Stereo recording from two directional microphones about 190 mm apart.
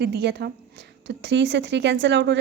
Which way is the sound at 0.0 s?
60° right (ahead or behind).